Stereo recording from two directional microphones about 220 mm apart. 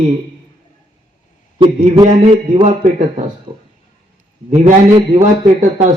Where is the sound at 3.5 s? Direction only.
15° right (ahead or behind).